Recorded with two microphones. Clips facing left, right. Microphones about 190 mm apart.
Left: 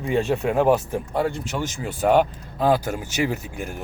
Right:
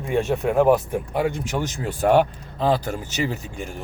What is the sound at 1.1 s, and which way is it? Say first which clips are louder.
Speech: right 1 dB; 15° right (ahead or behind).